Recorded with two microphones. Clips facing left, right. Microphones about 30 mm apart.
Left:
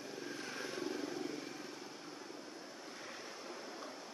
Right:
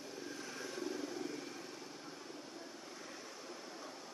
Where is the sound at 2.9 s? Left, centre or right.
Left.